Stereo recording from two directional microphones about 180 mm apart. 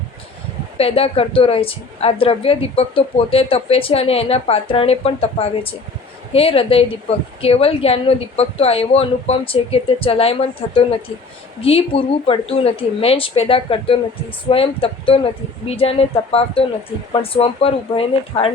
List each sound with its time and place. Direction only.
0.8 s a woman's voice: 30° left (ahead or behind)
11.6 s a woman's voice: 35° left (ahead or behind)